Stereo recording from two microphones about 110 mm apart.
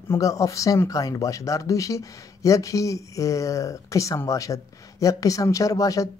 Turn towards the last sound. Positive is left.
turn(degrees=30)  # may be behind; listen again after turning